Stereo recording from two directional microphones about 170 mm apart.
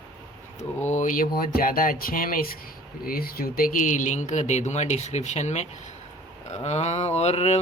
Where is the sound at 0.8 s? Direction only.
45° left (ahead or behind).